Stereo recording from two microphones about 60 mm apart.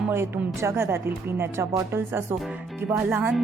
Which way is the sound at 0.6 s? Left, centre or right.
Right.